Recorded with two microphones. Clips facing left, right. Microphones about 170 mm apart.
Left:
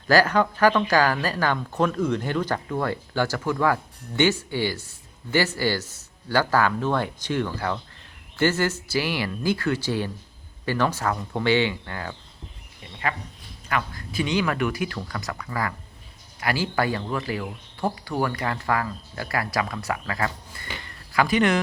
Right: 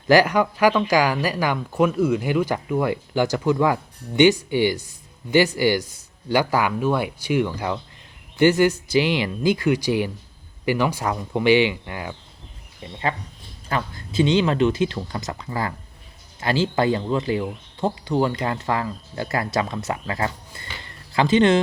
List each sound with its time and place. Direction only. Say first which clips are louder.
0.1 s speech: right 3 dB; 15° right (ahead or behind)
12.8 s speech: right 3 dB; 25° right (ahead or behind)